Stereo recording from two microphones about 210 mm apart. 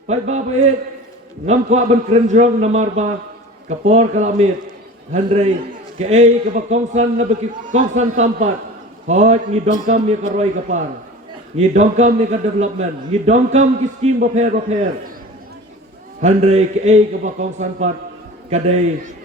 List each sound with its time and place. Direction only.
0.1 s a man's voice: 30° right (ahead or behind)
1.5 s a man's voice: 30° right (ahead or behind)
9.0 s a man's voice: 30° right (ahead or behind)
16.2 s a man's voice: 30° right (ahead or behind)